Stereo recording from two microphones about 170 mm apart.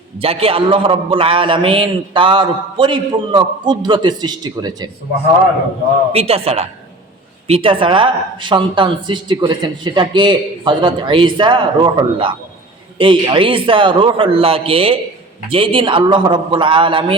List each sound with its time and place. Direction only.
0.2 s speech: 35° right (ahead or behind)
6.1 s a man's voice: 35° right (ahead or behind)